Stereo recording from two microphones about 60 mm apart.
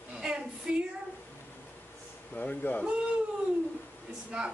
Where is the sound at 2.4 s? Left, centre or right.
Left.